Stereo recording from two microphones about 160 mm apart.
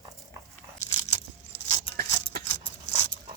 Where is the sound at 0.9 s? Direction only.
20° left (ahead or behind).